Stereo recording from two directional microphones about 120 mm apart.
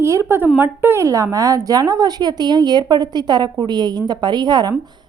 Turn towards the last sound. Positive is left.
turn(degrees=-40)  # may be behind; listen again after turning